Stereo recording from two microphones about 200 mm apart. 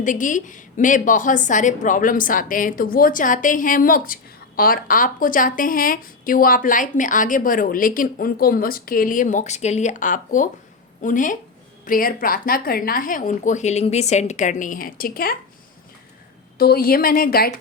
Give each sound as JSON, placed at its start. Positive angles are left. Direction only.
{"t": 0.0, "sound": "a woman's voice", "side_deg": 40}
{"t": 16.6, "sound": "a woman's voice", "side_deg": 50}